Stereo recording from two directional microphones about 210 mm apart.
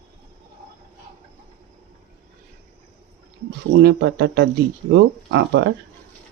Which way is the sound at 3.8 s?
55° right (ahead or behind).